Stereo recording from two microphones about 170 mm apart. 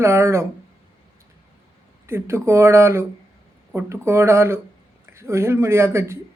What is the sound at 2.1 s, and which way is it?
Speech, 15° right (ahead or behind).